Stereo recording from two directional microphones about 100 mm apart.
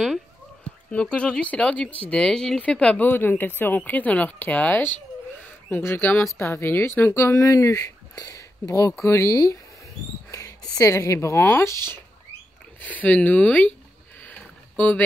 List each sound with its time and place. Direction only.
0.9 s speech: 10° left (ahead or behind)
3.1 s speech: 20° left (ahead or behind)
12.8 s speech: 15° left (ahead or behind)
14.4 s rowboat: 15° left (ahead or behind)